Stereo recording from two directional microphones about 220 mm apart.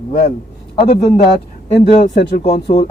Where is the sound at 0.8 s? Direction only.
30° left (ahead or behind).